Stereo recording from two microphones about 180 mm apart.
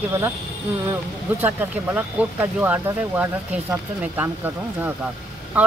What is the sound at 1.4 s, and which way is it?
Speech, 10° right (ahead or behind).